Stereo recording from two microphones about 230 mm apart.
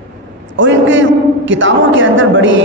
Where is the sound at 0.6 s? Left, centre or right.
Right.